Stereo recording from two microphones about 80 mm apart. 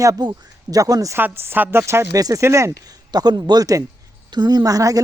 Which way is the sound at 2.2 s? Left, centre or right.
Right.